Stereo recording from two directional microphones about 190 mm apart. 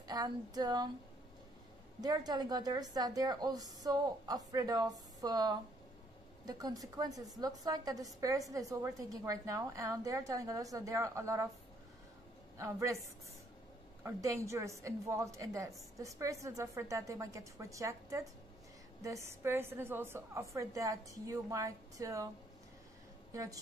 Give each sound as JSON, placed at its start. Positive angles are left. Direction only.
{"t": 0.0, "sound": "a sound", "side_deg": -20}
{"t": 2.0, "sound": "a woman's voice", "side_deg": -20}
{"t": 12.5, "sound": "a woman's voice", "side_deg": -15}
{"t": 14.0, "sound": "a woman's voice", "side_deg": -15}
{"t": 23.3, "sound": "a woman's voice", "side_deg": -15}